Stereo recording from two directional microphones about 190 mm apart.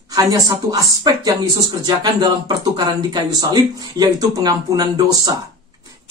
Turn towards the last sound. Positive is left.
turn(degrees=-20)  # may be behind; listen again after turning